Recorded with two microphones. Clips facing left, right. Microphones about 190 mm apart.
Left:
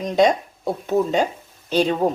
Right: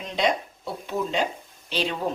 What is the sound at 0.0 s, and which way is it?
Speech, 45° left (ahead or behind).